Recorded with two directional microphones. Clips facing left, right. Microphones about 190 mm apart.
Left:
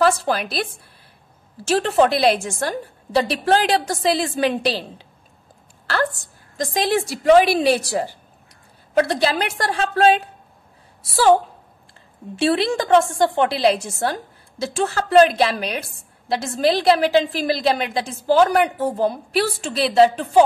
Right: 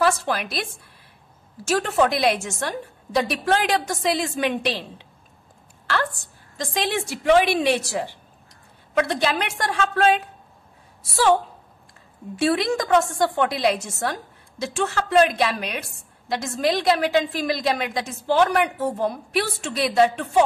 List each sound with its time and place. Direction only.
0.0 s a woman's voice: 35° left (ahead or behind)
1.7 s a woman's voice: 30° left (ahead or behind)
6.5 s a woman's voice: 40° left (ahead or behind)
12.4 s a woman's voice: 30° left (ahead or behind)